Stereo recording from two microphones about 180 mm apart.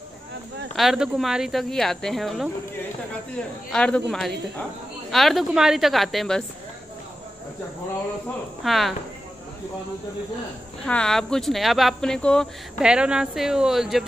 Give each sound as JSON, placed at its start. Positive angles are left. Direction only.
{"t": 0.7, "sound": "speech", "side_deg": 0}
{"t": 3.7, "sound": "speech", "side_deg": 5}
{"t": 5.1, "sound": "speech", "side_deg": 0}
{"t": 8.6, "sound": "speech", "side_deg": 0}
{"t": 10.8, "sound": "speech", "side_deg": 5}